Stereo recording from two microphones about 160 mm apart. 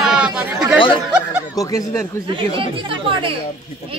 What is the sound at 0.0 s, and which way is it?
Chatter, 5° right (ahead or behind).